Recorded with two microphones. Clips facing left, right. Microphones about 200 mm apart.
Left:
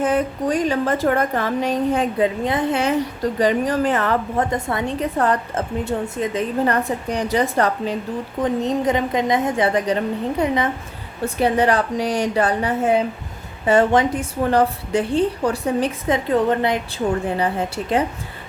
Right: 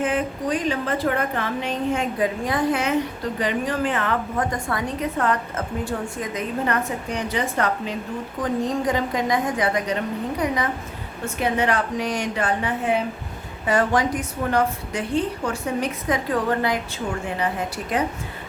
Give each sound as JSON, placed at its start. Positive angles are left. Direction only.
{"t": 0.0, "sound": "a woman's voice", "side_deg": 40}
{"t": 3.4, "sound": "a woman's voice", "side_deg": 40}
{"t": 4.4, "sound": "a woman's voice", "side_deg": 25}
{"t": 8.4, "sound": "a woman's voice", "side_deg": 20}
{"t": 13.7, "sound": "a woman's voice", "side_deg": 25}